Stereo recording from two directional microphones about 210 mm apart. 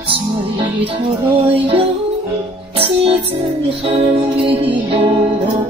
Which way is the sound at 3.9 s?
30° right (ahead or behind).